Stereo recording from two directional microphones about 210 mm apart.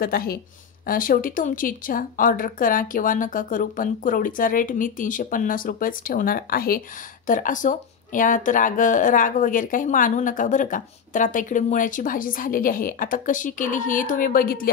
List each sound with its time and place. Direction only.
0.0 s speech: 45° left (ahead or behind)